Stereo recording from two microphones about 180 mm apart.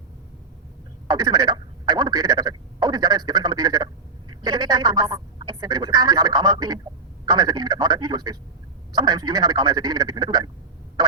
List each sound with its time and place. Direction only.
1.0 s telephone: 20° right (ahead or behind)
4.4 s speech: 20° right (ahead or behind)